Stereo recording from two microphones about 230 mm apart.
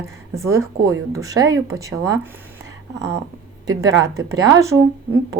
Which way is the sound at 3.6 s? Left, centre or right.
Centre.